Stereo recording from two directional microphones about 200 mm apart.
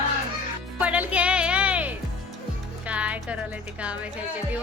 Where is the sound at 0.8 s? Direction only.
5° right (ahead or behind).